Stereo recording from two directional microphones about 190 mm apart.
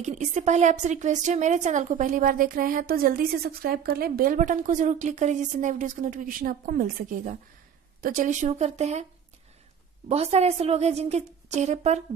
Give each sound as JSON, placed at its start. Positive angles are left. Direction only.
{"t": 0.0, "sound": "a woman's voice", "side_deg": -40}
{"t": 10.0, "sound": "a woman's voice", "side_deg": -35}